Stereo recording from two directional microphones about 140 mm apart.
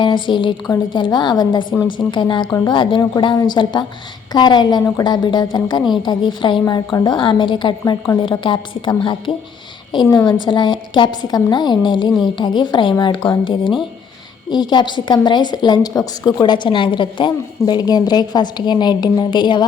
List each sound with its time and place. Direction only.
0.0 s a woman's voice: 35° left (ahead or behind)